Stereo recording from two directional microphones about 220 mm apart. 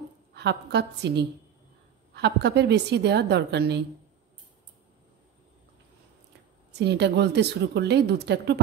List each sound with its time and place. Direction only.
0.3 s a woman's voice: 50° right (ahead or behind)
6.7 s a woman's voice: 50° right (ahead or behind)